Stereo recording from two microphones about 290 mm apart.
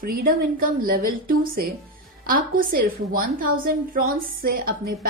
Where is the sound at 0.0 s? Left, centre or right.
Right.